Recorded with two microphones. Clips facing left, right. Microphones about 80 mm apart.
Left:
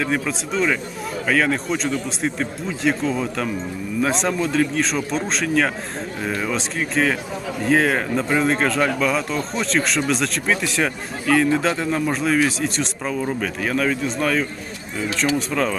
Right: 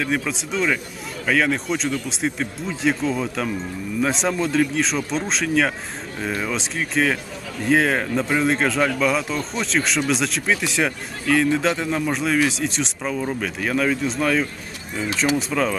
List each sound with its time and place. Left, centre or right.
0.0 s speech: centre